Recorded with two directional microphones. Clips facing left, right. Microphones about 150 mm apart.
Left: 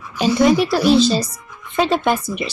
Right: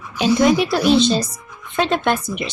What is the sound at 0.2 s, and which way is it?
Speech, centre (ahead or behind).